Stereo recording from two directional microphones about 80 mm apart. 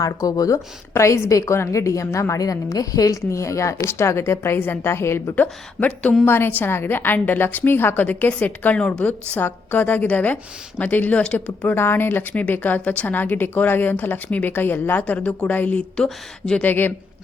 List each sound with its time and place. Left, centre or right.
0.0 s a woman's voice: left
5.3 s speech: centre
6.2 s speech: left
16.0 s speech: centre
16.6 s speech: left